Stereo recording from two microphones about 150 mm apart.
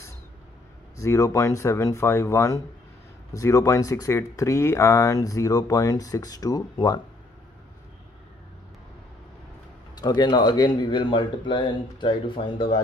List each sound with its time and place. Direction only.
0.9 s speech: 20° left (ahead or behind)
9.9 s speech: 25° left (ahead or behind)